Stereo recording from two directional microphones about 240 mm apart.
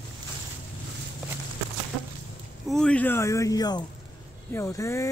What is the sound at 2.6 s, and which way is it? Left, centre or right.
Speech, centre.